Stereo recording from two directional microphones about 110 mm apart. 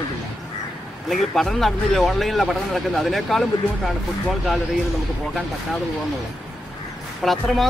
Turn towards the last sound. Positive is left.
turn(degrees=0)  # may be behind; listen again after turning